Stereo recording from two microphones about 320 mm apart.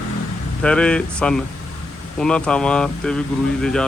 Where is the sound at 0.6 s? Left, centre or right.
Centre.